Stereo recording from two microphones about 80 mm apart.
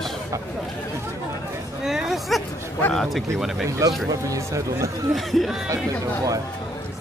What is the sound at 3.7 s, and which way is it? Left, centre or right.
Speech, right.